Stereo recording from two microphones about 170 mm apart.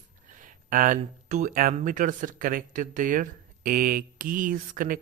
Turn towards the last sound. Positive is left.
turn(degrees=-55)  # may be behind; listen again after turning